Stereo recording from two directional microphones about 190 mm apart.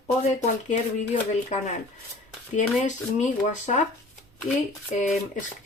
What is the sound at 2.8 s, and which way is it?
Speech, 40° left (ahead or behind).